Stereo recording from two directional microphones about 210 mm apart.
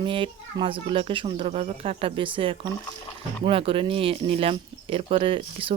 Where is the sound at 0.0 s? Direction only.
25° right (ahead or behind).